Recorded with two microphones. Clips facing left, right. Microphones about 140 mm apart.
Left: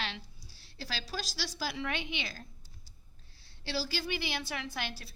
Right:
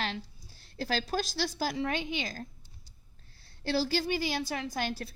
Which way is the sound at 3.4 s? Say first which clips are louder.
Right 7 dB; 50° right (ahead or behind).